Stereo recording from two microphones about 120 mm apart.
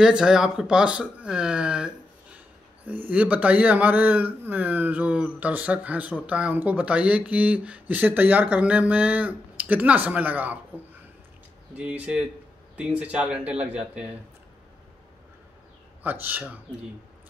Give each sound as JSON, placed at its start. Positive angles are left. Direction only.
{"t": 0.0, "sound": "speech", "side_deg": -5}
{"t": 11.7, "sound": "speech", "side_deg": -10}
{"t": 16.0, "sound": "speech", "side_deg": -15}